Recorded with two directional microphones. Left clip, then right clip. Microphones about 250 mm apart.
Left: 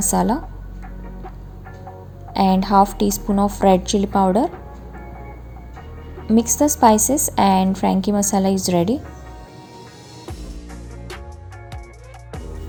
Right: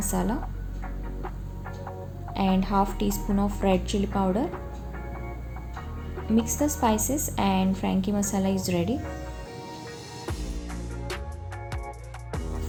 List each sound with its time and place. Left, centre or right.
0.0 s a woman's voice: left
2.3 s a woman's voice: left
6.3 s a woman's voice: left